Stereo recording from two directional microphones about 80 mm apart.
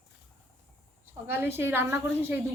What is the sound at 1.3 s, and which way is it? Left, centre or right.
A woman's voice, right.